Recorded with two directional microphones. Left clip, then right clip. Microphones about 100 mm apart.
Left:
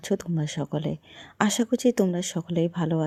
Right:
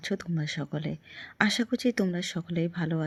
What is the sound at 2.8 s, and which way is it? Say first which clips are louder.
Speech: left 5 dB; 40° left (ahead or behind).